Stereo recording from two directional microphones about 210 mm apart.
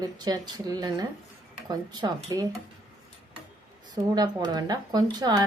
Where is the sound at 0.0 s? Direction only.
20° right (ahead or behind).